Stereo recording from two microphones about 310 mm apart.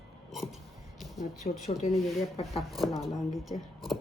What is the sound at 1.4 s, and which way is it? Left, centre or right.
Speech, left.